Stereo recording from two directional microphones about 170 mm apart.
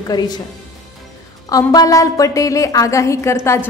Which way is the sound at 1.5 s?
20° left (ahead or behind).